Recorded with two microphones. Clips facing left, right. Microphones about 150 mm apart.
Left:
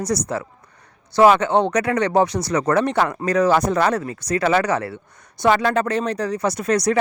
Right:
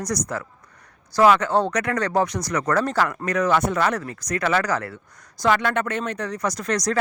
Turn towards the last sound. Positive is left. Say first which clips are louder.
# left 5 dB
turn(degrees=25)  # may be behind; listen again after turning